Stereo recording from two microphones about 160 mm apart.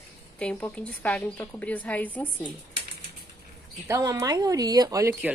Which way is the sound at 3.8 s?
20° right (ahead or behind).